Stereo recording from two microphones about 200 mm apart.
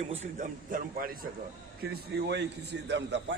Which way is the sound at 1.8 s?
55° right (ahead or behind).